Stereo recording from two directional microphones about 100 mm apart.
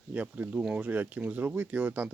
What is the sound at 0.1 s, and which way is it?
Speech, 15° right (ahead or behind).